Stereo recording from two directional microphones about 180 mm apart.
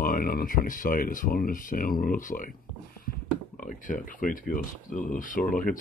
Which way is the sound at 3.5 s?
45° left (ahead or behind).